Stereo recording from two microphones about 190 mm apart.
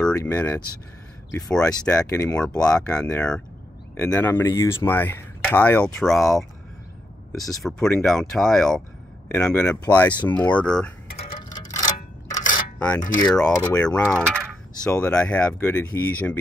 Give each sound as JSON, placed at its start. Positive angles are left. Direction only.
{"t": 0.1, "sound": "speech", "side_deg": 10}
{"t": 1.7, "sound": "speech", "side_deg": 20}
{"t": 2.0, "sound": "speech", "side_deg": 10}
{"t": 7.6, "sound": "speech", "side_deg": 5}
{"t": 11.5, "sound": "a sound", "side_deg": 20}
{"t": 12.7, "sound": "a sound", "side_deg": 5}
{"t": 13.3, "sound": "speech", "side_deg": 5}